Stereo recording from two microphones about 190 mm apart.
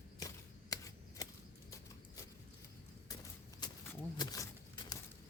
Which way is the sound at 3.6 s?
25° left (ahead or behind).